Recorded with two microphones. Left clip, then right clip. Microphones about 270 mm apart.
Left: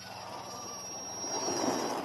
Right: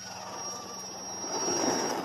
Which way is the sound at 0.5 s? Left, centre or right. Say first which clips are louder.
Right 1 dB; centre.